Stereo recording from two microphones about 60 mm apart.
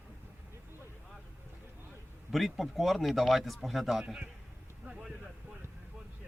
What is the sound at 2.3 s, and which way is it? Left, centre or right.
A man's voice, centre.